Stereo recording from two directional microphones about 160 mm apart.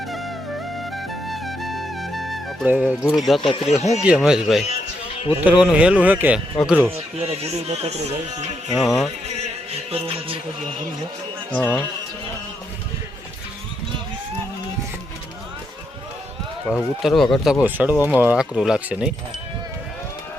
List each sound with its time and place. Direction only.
0.8 s music: centre (ahead or behind)
2.6 s speech: 5° right (ahead or behind)
3.8 s a man's voice: 45° left (ahead or behind)
4.0 s speech: 5° right (ahead or behind)
6.9 s speech: 40° right (ahead or behind)
8.7 s speech: centre (ahead or behind)
9.9 s speech: 35° right (ahead or behind)
11.5 s speech: 15° left (ahead or behind)
16.6 s speech: centre (ahead or behind)